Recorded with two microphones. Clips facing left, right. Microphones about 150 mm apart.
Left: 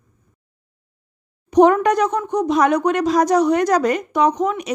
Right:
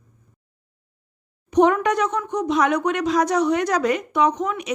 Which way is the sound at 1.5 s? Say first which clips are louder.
Left 4 dB; 40° left (ahead or behind).